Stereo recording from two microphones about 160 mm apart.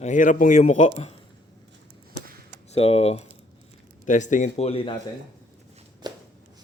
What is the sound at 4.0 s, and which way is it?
Speech, 50° left (ahead or behind).